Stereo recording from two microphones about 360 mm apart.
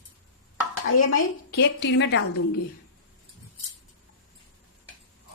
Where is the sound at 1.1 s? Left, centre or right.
Left.